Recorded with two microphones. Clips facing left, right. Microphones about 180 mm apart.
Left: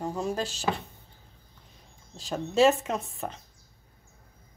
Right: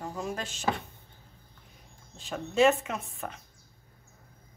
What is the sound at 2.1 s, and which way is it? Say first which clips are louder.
Speech: left 3 dB; 35° left (ahead or behind).